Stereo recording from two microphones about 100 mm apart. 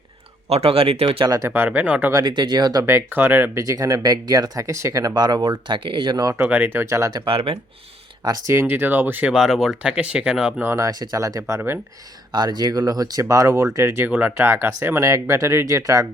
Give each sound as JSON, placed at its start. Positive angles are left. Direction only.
{"t": 0.5, "sound": "speech", "side_deg": -80}
{"t": 1.4, "sound": "speech", "side_deg": -20}
{"t": 2.1, "sound": "speech", "side_deg": -50}
{"t": 2.8, "sound": "speech", "side_deg": -25}
{"t": 3.6, "sound": "speech", "side_deg": -35}
{"t": 6.4, "sound": "speech", "side_deg": -20}
{"t": 6.9, "sound": "speech", "side_deg": -35}
{"t": 7.3, "sound": "speech", "side_deg": -75}
{"t": 8.4, "sound": "speech", "side_deg": -25}
{"t": 9.3, "sound": "speech", "side_deg": -5}
{"t": 10.6, "sound": "speech", "side_deg": -30}
{"t": 12.3, "sound": "speech", "side_deg": -45}
{"t": 14.1, "sound": "speech", "side_deg": -15}